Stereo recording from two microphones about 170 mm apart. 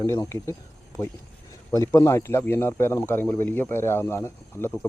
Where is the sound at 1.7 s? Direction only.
20° left (ahead or behind).